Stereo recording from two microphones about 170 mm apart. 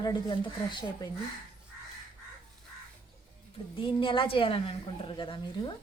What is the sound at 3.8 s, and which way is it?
A woman's voice, 30° left (ahead or behind).